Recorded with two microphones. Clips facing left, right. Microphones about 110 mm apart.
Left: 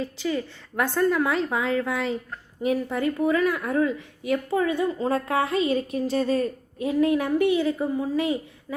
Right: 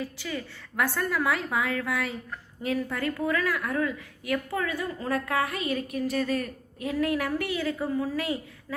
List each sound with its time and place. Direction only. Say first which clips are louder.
0.0 s a woman's voice: left 7 dB; 20° left (ahead or behind)